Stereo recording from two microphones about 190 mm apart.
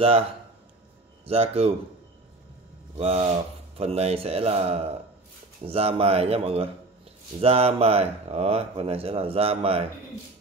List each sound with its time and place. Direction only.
1.2 s speech: 30° right (ahead or behind)
3.0 s speech: 30° right (ahead or behind)